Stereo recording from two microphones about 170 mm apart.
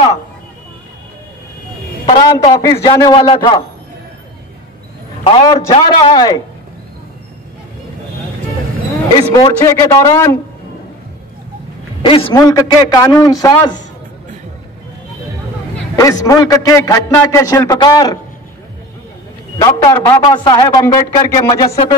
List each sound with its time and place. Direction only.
2.0 s a man's voice: 25° left (ahead or behind)
5.2 s a man's voice: 25° left (ahead or behind)
9.1 s a man's voice: 20° left (ahead or behind)
12.0 s a man's voice: 30° left (ahead or behind)
16.0 s a man's voice: 20° left (ahead or behind)
19.6 s a man's voice: 20° left (ahead or behind)